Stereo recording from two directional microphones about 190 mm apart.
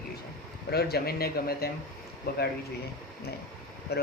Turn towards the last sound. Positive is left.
turn(degrees=60)  # may be behind; listen again after turning